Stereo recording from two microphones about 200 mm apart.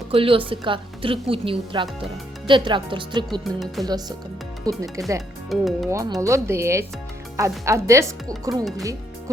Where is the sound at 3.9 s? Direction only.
20° right (ahead or behind).